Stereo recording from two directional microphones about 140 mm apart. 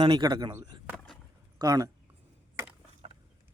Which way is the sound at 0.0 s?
30° right (ahead or behind).